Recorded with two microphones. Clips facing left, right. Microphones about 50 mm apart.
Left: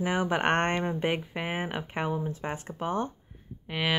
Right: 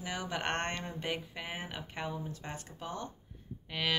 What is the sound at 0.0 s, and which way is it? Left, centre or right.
Speech, left.